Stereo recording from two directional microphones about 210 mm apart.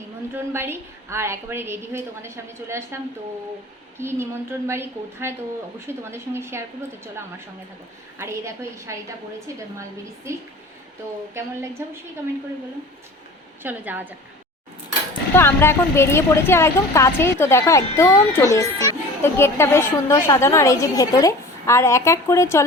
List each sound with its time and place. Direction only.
0.3 s a woman's voice: 10° right (ahead or behind)
10.3 s a woman's voice: 15° right (ahead or behind)
11.8 s a woman's voice: 10° right (ahead or behind)
13.6 s a woman's voice: 10° right (ahead or behind)
15.4 s a woman's voice: 10° left (ahead or behind)